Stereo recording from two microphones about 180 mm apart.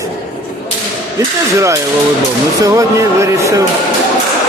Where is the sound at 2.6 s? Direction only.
15° right (ahead or behind).